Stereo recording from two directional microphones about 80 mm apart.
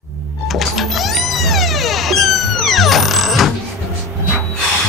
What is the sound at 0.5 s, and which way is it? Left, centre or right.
Music, centre.